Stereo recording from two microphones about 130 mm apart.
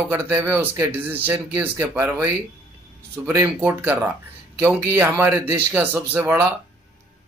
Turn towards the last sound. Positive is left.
turn(degrees=-20)  # may be behind; listen again after turning